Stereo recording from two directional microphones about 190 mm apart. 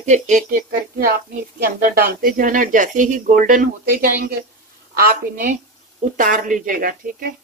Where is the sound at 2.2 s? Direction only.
50° right (ahead or behind).